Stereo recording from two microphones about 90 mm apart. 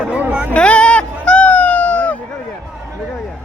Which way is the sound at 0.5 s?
10° left (ahead or behind).